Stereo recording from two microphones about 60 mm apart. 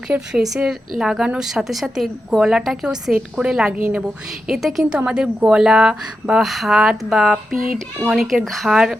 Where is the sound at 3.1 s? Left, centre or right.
Centre.